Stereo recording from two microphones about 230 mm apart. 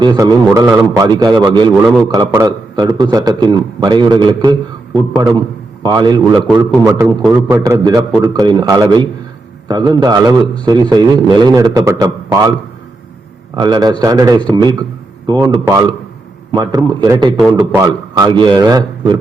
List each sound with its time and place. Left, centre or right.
0.0 s a man's voice: centre
13.6 s a man's voice: centre